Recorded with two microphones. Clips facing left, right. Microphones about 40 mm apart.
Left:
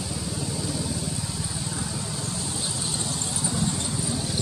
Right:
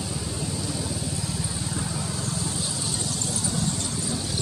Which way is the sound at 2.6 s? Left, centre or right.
Left.